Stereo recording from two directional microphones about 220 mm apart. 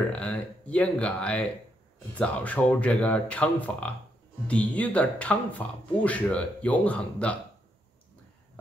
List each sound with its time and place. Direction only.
0.1 s speech: 5° left (ahead or behind)